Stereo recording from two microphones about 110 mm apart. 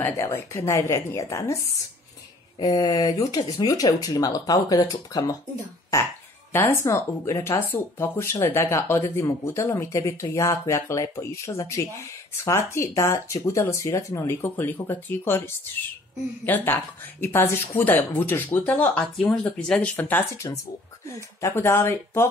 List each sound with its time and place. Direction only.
0.0 s speech: 25° left (ahead or behind)
2.6 s speech: 35° left (ahead or behind)